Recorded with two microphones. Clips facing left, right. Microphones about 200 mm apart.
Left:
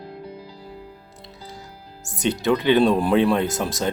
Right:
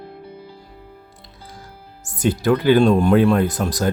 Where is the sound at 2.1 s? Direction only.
20° left (ahead or behind).